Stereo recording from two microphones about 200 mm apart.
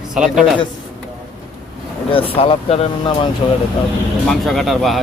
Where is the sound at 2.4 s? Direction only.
30° left (ahead or behind).